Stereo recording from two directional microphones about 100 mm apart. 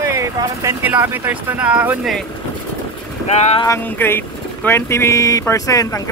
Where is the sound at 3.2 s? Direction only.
90° left.